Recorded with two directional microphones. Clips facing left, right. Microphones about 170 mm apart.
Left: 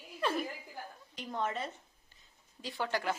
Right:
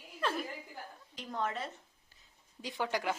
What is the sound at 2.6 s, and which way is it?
Speech, 15° right (ahead or behind).